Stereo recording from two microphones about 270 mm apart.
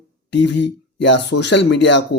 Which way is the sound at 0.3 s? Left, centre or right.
Left.